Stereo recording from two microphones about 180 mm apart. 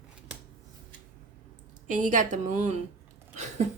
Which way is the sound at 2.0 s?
45° right (ahead or behind).